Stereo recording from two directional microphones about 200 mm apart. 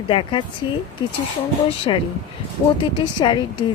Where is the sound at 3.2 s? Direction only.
20° left (ahead or behind).